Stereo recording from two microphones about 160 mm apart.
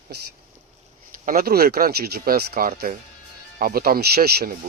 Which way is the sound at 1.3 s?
65° right (ahead or behind).